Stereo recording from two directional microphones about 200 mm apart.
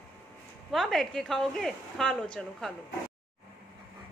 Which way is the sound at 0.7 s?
Centre (ahead or behind).